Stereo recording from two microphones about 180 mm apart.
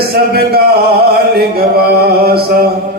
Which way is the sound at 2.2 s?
60° right (ahead or behind).